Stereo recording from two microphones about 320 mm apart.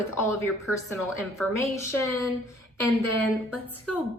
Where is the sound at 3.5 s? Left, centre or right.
Centre.